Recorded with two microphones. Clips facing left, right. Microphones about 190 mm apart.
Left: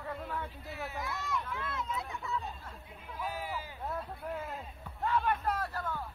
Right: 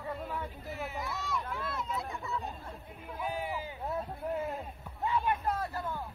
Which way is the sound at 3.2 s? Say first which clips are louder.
Right 3 dB; 20° right (ahead or behind).